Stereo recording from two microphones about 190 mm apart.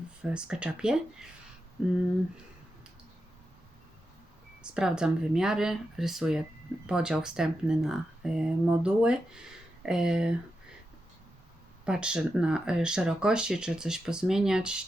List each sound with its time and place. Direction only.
0.2 s speech: 5° right (ahead or behind)
4.6 s speech: 5° right (ahead or behind)
11.9 s speech: 5° right (ahead or behind)